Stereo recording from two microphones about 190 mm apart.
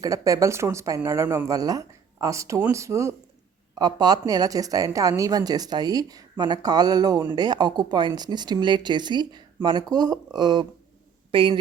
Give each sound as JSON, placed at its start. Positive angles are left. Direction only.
{"t": 0.0, "sound": "a woman's voice", "side_deg": -20}